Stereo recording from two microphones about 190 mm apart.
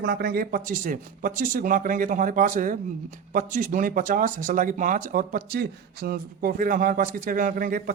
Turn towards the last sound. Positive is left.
turn(degrees=-45)  # may be behind; listen again after turning